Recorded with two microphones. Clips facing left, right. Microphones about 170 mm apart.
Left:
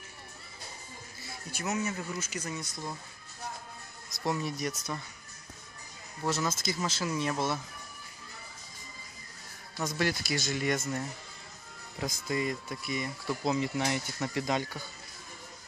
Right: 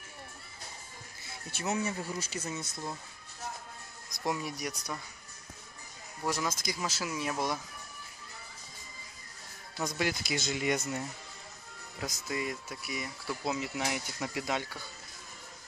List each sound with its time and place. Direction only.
1.5 s speech: 30° right (ahead or behind)
4.1 s speech: 15° right (ahead or behind)
6.2 s speech: 10° right (ahead or behind)
9.9 s speech: 15° right (ahead or behind)
12.0 s speech: 5° right (ahead or behind)